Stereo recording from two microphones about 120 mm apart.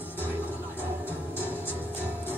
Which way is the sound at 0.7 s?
15° right (ahead or behind).